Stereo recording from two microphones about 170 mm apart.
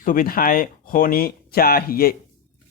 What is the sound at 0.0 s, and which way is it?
A man's voice, 55° left (ahead or behind).